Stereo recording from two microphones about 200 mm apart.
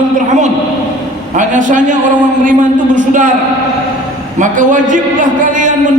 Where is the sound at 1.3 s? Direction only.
40° right (ahead or behind).